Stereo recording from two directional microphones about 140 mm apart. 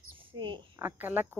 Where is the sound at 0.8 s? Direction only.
15° right (ahead or behind).